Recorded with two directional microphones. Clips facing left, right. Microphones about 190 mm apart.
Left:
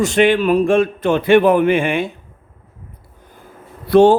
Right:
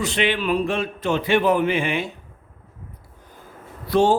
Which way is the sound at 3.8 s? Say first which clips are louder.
Left 8 dB; 60° left (ahead or behind).